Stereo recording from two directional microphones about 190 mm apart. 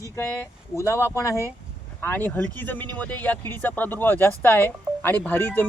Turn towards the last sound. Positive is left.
turn(degrees=10)  # may be behind; listen again after turning